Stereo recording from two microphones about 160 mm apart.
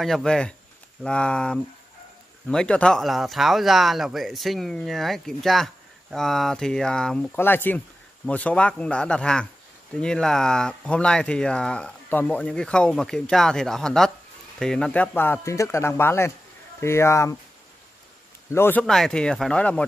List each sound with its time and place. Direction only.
0.0 s speech: 5° left (ahead or behind); by 17.4 s 20° left (ahead or behind)
18.5 s speech: 15° left (ahead or behind)